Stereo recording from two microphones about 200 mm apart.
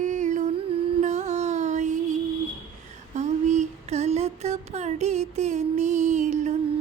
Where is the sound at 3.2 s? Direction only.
35° right (ahead or behind).